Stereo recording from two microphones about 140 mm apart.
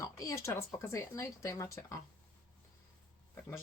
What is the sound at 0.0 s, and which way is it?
Speech, 20° left (ahead or behind).